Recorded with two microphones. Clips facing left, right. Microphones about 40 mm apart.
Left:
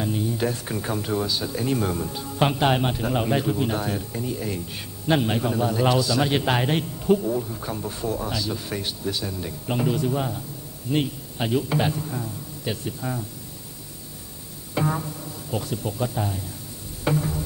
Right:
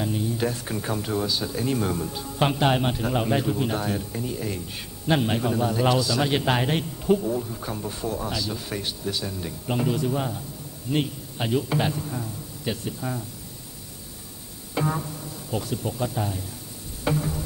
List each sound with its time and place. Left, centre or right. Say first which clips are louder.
0.0 s speech: left 1 dB; centre
14.7 s music: left 1 dB; centre
15.5 s speech: even; centre
17.0 s a sound: left 1 dB; centre